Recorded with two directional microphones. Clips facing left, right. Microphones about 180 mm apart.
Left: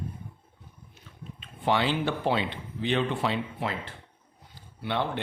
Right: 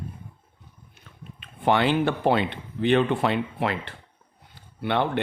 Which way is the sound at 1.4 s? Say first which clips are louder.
Right 4 dB; 60° right (ahead or behind).